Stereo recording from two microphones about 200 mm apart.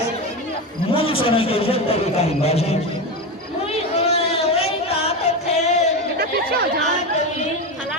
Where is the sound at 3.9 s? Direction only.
30° left (ahead or behind).